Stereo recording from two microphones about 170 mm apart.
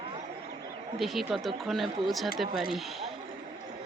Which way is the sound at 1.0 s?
Centre (ahead or behind).